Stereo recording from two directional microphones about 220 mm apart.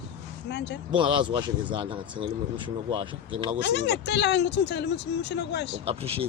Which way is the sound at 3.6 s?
50° left (ahead or behind).